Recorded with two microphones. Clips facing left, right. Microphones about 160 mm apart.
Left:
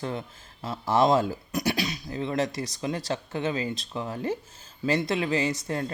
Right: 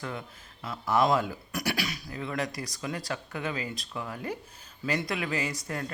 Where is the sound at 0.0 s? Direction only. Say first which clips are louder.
Left 5 dB; 30° left (ahead or behind).